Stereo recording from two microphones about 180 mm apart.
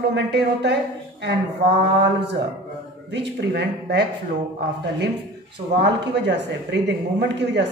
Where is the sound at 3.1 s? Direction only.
75° right (ahead or behind).